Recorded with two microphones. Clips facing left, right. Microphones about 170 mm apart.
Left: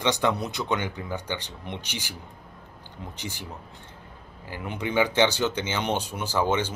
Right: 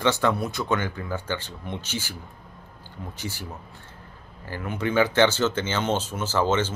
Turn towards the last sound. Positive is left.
turn(degrees=15)  # may be behind; listen again after turning